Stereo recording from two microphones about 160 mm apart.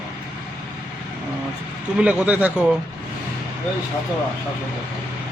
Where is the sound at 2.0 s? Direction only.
10° right (ahead or behind).